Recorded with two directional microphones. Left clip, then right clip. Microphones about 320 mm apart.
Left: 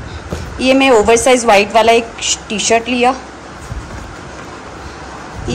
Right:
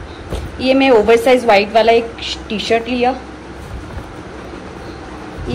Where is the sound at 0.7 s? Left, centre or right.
Centre.